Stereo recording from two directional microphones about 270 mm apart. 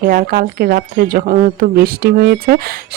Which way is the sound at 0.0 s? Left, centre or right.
Right.